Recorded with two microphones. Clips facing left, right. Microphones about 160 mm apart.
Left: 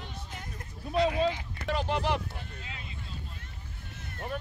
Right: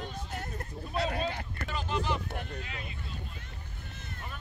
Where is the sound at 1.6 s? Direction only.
70° left (ahead or behind).